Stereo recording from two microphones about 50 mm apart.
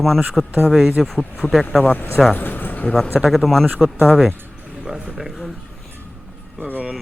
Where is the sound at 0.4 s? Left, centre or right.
Centre.